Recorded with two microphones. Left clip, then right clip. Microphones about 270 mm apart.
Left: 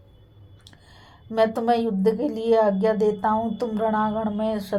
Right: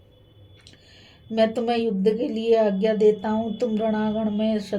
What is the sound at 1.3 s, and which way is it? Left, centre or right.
Speech, left.